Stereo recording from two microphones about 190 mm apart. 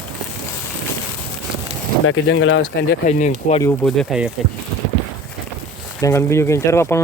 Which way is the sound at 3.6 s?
5° left (ahead or behind).